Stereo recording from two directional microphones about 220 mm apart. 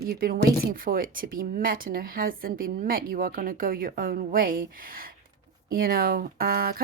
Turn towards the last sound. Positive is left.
turn(degrees=-40)  # may be behind; listen again after turning